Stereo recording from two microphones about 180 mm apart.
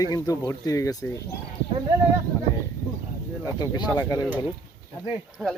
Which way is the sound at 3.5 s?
20° left (ahead or behind).